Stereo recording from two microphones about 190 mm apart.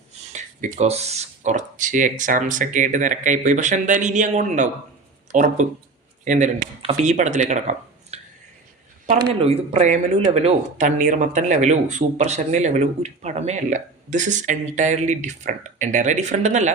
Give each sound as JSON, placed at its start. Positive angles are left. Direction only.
{"t": 0.3, "sound": "speech", "side_deg": -40}
{"t": 9.3, "sound": "speech", "side_deg": -30}